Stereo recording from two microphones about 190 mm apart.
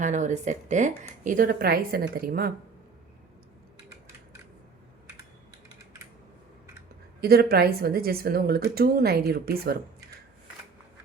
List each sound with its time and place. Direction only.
0.0 s a woman's voice: 40° right (ahead or behind)
7.2 s a woman's voice: 55° right (ahead or behind)